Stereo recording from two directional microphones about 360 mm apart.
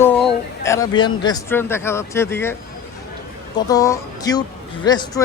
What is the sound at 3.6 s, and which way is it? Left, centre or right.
Speech, centre.